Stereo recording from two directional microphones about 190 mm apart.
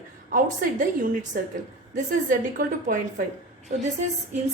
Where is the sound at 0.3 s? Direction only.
45° right (ahead or behind).